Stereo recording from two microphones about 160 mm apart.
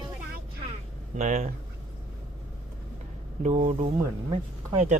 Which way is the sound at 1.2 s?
45° right (ahead or behind).